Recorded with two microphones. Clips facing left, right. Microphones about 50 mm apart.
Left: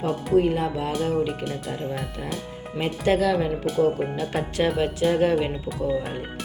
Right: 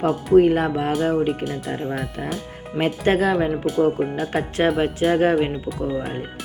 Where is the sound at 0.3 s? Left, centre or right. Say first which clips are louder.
Right 6 dB; right.